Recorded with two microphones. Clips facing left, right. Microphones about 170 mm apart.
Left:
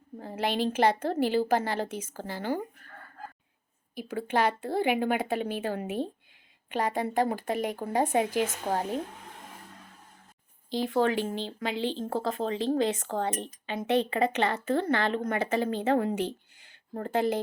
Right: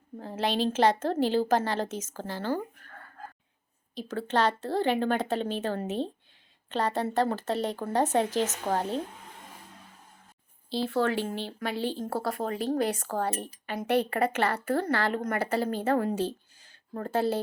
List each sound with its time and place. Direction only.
0.2 s a woman's voice: 15° left (ahead or behind)
3.9 s a woman's voice: 10° left (ahead or behind)
10.7 s a woman's voice: 15° left (ahead or behind)